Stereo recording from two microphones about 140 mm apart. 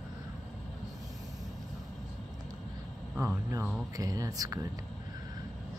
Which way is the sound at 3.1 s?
15° right (ahead or behind).